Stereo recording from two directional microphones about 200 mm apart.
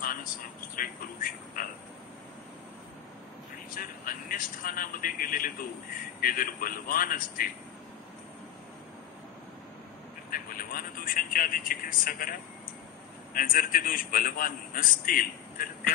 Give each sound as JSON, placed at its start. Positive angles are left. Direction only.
{"t": 0.0, "sound": "a sound", "side_deg": 45}
{"t": 0.7, "sound": "a man's voice", "side_deg": 45}
{"t": 3.7, "sound": "a man's voice", "side_deg": 45}
{"t": 10.3, "sound": "a man's voice", "side_deg": 45}